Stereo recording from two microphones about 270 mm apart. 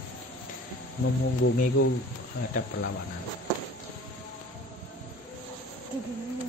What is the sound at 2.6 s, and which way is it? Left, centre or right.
Speech, left.